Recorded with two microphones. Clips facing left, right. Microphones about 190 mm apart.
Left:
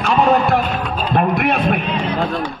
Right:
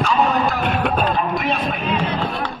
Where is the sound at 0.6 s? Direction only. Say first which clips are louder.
Right 2 dB; 60° right (ahead or behind).